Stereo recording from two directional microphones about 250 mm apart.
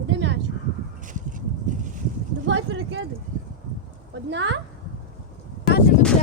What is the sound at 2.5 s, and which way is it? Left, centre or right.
Speech, right.